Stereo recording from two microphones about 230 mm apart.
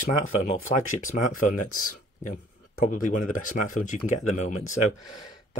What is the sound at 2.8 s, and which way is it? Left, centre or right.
Speech, left.